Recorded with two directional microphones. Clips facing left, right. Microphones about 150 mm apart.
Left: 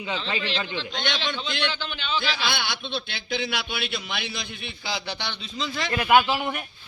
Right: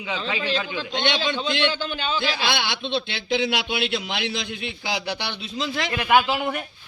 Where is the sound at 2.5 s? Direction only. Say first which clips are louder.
Right 4 dB; 90° right.